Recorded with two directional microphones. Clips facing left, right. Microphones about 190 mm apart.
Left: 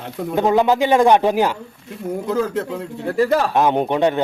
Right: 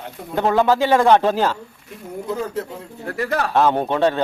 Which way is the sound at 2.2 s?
90° left.